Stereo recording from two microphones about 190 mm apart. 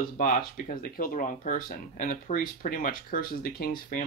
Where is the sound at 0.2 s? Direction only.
45° left (ahead or behind).